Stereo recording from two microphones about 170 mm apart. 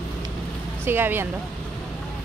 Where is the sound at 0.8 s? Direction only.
10° right (ahead or behind).